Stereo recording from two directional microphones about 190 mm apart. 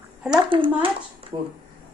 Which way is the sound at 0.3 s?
25° right (ahead or behind).